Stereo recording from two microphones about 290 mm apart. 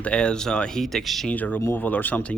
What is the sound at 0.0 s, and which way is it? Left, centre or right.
Speech, centre.